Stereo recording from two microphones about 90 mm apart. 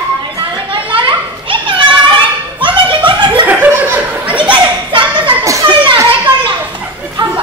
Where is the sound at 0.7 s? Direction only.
70° right (ahead or behind).